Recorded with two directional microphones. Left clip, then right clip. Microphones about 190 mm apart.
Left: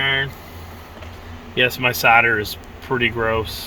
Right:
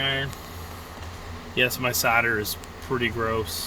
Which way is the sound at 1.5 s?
10° left (ahead or behind).